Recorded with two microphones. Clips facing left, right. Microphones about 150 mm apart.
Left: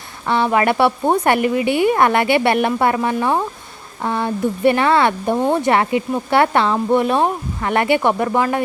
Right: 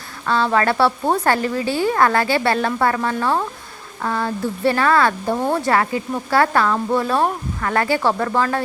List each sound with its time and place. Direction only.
0.3 s a woman's voice: 20° left (ahead or behind)